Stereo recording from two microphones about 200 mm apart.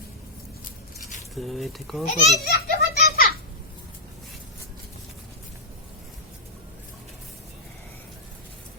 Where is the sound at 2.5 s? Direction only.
50° left (ahead or behind).